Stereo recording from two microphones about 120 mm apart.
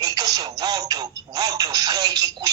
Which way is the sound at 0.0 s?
35° right (ahead or behind).